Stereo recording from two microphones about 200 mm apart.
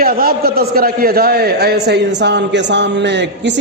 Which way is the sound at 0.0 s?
45° right (ahead or behind).